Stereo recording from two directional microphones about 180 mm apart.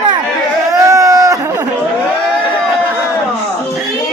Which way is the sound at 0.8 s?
15° right (ahead or behind).